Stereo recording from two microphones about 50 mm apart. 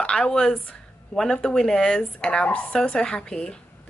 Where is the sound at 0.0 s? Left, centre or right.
Centre.